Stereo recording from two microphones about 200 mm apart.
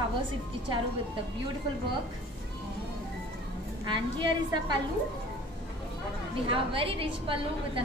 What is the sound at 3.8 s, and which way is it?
Speech, 25° right (ahead or behind).